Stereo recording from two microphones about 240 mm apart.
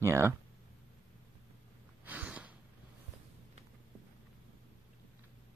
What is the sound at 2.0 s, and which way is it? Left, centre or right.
Gasp, centre.